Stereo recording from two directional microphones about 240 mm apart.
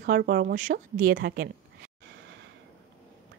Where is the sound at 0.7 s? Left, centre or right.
Right.